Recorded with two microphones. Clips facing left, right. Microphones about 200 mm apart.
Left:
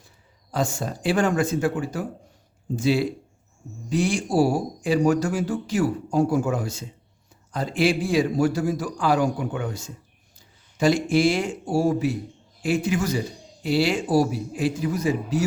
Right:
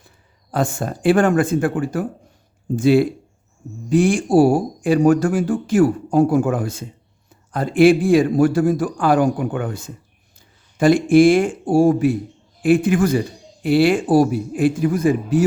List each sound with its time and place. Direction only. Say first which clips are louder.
0.5 s a man's voice: right 4 dB; 55° right (ahead or behind)